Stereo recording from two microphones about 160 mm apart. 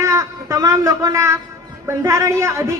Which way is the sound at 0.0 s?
20° right (ahead or behind).